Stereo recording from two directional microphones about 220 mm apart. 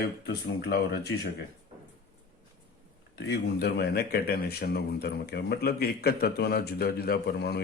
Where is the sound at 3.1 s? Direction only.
50° left (ahead or behind).